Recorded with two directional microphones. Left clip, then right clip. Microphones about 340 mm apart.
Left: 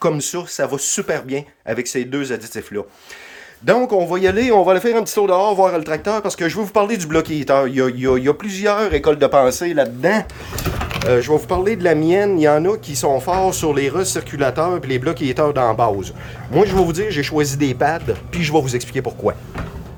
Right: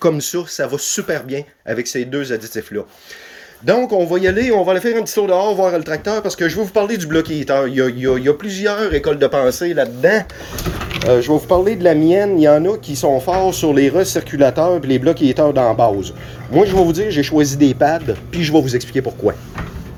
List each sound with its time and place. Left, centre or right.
0.0 s speech: centre
3.7 s speech: centre
10.8 s a sound: centre
11.1 s speech: centre